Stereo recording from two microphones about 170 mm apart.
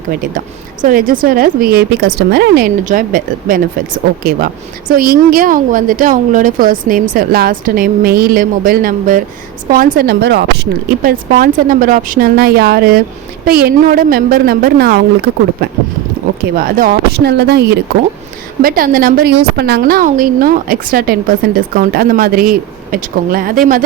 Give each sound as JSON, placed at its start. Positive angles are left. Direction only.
{"t": 0.2, "sound": "speech", "side_deg": -50}
{"t": 11.0, "sound": "speech", "side_deg": -55}
{"t": 16.6, "sound": "speech", "side_deg": -55}
{"t": 18.6, "sound": "speech", "side_deg": -55}